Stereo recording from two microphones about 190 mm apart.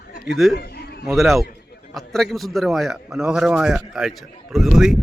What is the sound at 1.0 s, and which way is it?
A man's voice, centre (ahead or behind).